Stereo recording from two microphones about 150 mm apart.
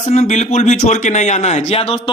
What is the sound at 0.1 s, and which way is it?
A man's voice, 50° left (ahead or behind).